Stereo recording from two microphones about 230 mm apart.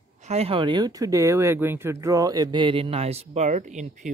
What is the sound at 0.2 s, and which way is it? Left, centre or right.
Speech, right.